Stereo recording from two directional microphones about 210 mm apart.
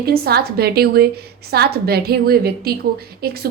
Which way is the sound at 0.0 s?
50° right (ahead or behind).